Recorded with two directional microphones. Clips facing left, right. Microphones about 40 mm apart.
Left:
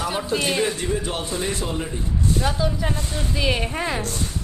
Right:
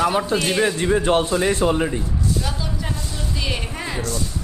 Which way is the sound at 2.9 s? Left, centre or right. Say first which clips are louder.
Left 2 dB; left.